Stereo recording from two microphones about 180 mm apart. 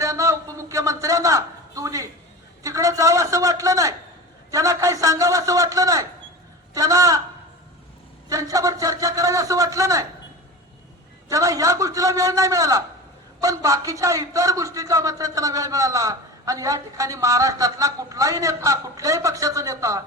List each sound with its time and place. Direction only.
0.0 s a sound: 20° right (ahead or behind)
2.6 s a man's voice: 20° right (ahead or behind)
8.3 s a man's voice: 20° right (ahead or behind)
11.3 s a man's voice: 20° right (ahead or behind)